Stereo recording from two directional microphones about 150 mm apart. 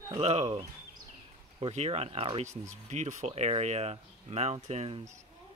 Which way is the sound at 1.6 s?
40° right (ahead or behind).